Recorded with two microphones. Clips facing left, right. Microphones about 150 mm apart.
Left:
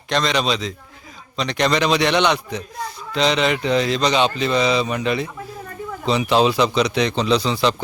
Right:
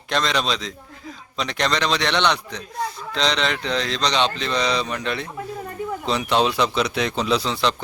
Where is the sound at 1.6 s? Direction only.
10° left (ahead or behind).